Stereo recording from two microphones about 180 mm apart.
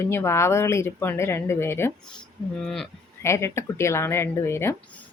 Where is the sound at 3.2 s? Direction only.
15° left (ahead or behind).